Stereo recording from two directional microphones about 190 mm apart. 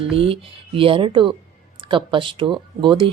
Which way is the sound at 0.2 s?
30° right (ahead or behind).